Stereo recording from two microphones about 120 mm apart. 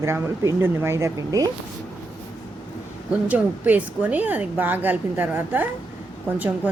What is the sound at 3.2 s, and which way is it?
A woman's voice, 15° right (ahead or behind).